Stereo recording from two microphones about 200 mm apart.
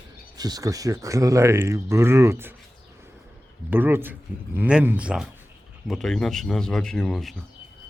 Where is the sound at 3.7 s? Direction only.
10° right (ahead or behind).